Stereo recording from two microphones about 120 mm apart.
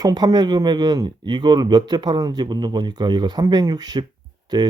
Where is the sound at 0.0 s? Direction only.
35° right (ahead or behind).